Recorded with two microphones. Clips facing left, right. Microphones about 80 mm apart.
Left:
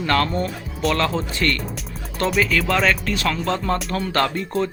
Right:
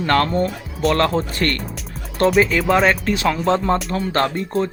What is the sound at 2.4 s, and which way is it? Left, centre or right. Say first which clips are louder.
Speech: right 1 dB; right.